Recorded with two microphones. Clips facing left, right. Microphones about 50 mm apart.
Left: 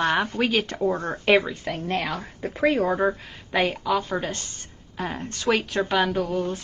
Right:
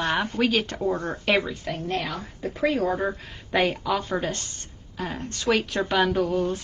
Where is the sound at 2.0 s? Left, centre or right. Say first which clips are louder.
Left 2 dB; left.